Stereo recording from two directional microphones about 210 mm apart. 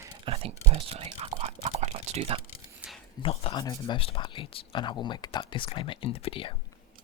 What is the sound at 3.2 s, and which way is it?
Speech, 25° left (ahead or behind).